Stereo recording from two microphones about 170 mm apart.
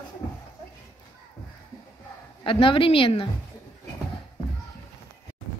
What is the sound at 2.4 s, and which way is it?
Speech, 30° left (ahead or behind).